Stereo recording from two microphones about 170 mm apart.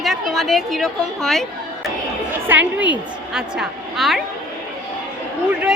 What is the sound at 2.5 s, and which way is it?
A woman's voice, 10° right (ahead or behind).